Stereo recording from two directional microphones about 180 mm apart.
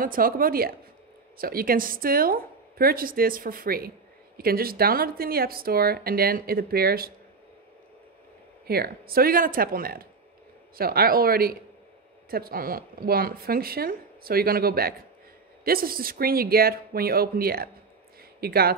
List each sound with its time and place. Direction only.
0.0 s a woman's voice: 50° right (ahead or behind)
8.6 s a woman's voice: 60° right (ahead or behind)